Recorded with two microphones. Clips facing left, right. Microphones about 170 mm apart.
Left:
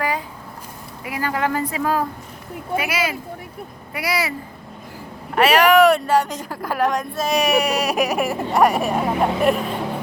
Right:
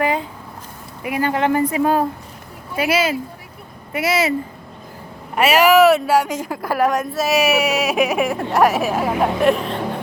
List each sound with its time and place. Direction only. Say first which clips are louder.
0.0 s a sound: right 4 dB; 25° right (ahead or behind)
1.0 s a woman's voice: right 4 dB; 20° right (ahead or behind)
5.3 s speech: right 1 dB; 10° right (ahead or behind)